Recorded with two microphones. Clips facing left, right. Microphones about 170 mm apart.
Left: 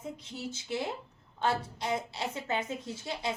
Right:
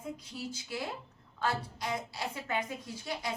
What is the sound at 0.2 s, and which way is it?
A woman's voice, 25° left (ahead or behind).